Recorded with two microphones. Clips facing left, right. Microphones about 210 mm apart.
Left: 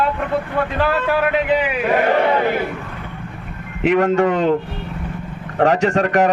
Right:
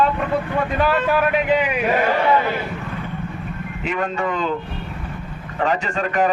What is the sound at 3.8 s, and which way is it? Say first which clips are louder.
Speech: left 9 dB; 75° left (ahead or behind).